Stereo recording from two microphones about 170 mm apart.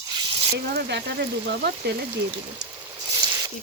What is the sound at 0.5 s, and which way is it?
Speech, 70° right (ahead or behind).